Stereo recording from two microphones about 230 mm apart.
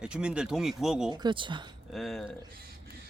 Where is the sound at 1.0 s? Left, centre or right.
Centre.